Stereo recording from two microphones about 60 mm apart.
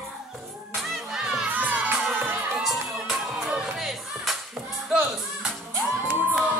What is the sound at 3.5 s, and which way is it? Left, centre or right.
Music, centre.